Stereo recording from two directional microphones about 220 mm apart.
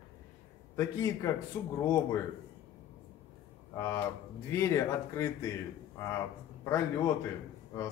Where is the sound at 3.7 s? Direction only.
10° left (ahead or behind).